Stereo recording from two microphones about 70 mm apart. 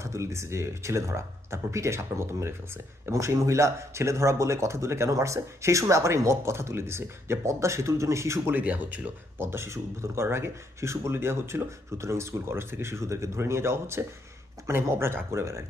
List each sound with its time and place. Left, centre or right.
0.0 s speech: right
8.5 s speech: right
9.4 s speech: right